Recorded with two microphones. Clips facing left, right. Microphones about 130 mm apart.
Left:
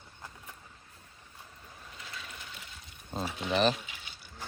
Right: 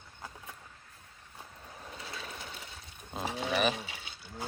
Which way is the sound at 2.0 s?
35° right (ahead or behind).